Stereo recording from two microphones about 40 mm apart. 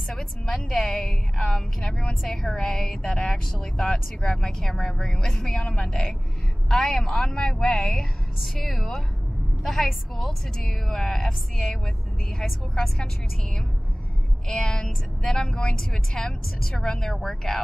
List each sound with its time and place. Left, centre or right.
0.1 s a woman's voice: centre
8.6 s a woman's voice: centre
14.5 s a woman's voice: centre